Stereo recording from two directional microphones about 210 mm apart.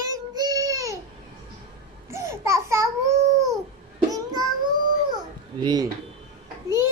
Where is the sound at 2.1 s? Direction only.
15° right (ahead or behind).